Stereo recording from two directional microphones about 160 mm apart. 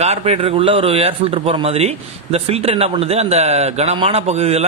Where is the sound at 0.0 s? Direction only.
40° right (ahead or behind).